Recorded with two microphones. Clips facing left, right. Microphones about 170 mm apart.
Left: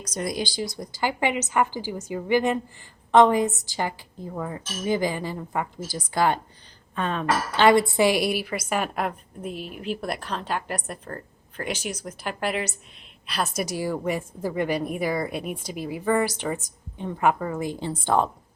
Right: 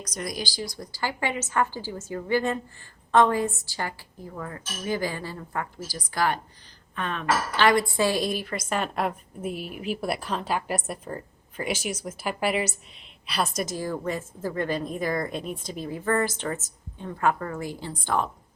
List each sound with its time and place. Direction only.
0.0 s a woman's voice: 25° left (ahead or behind)